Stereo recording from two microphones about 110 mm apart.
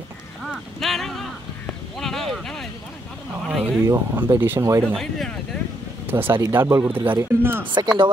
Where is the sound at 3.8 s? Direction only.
20° right (ahead or behind).